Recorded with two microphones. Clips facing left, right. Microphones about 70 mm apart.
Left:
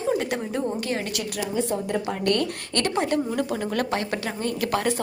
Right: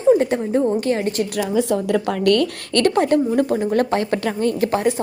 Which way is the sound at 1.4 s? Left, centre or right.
Right.